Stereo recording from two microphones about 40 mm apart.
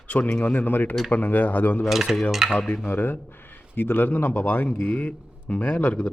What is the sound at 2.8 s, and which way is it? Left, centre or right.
A man's voice, left.